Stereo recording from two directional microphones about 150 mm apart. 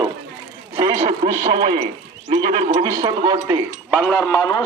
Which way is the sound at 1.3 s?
30° right (ahead or behind).